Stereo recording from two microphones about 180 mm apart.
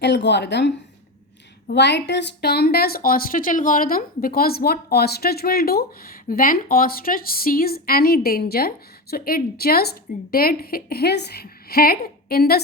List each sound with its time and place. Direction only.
0.0 s a woman's voice: 70° left (ahead or behind)